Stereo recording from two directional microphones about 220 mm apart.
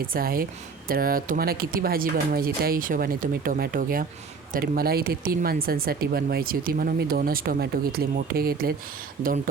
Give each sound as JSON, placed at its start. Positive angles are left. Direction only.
{"t": 0.1, "sound": "speech", "side_deg": -40}